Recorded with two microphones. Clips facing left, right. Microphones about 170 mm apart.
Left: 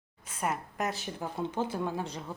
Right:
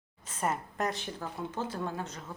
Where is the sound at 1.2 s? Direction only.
20° left (ahead or behind).